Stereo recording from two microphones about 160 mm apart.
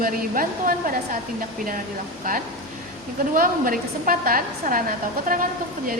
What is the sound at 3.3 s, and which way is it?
A woman's voice, 60° right (ahead or behind).